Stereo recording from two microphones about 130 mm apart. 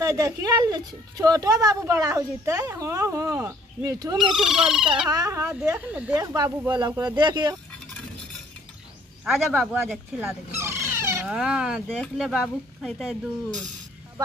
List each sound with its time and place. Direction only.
0.1 s speech: 30° right (ahead or behind)
4.2 s speech: 5° right (ahead or behind)
5.1 s speech: 30° right (ahead or behind)
5.4 s speech: 15° right (ahead or behind)
6.1 s speech: 30° right (ahead or behind)
9.2 s speech: 5° right (ahead or behind)
10.2 s a sound: 20° right (ahead or behind)
11.2 s speech: 5° right (ahead or behind)